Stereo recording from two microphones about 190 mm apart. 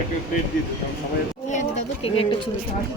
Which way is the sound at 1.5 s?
35° left (ahead or behind).